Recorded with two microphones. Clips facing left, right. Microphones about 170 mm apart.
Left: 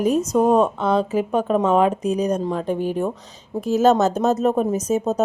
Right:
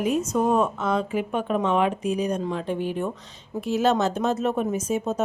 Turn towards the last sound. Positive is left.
turn(degrees=40)  # may be behind; listen again after turning